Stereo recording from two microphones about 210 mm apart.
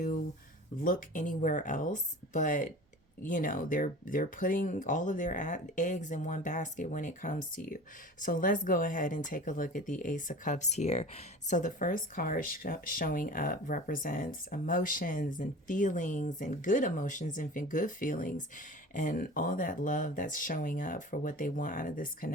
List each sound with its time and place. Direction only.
0.8 s speech: 40° left (ahead or behind)